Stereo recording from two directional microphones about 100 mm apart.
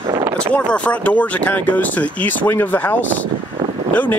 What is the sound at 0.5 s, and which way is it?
Speech, 15° left (ahead or behind).